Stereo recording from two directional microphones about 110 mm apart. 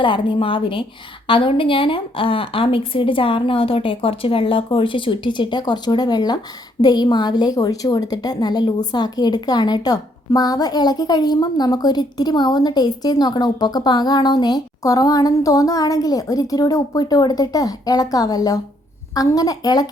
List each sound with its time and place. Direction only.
0.0 s a woman's voice: 50° left (ahead or behind)